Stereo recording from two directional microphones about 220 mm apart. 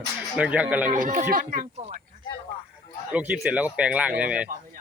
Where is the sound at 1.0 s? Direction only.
40° right (ahead or behind).